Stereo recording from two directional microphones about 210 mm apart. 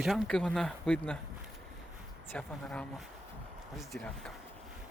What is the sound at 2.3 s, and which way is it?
Speech, 5° left (ahead or behind).